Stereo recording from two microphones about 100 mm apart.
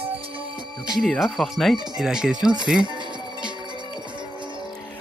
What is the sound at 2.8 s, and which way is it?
Speech, 50° right (ahead or behind).